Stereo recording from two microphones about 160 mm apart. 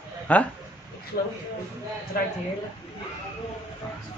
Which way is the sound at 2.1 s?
70° left (ahead or behind).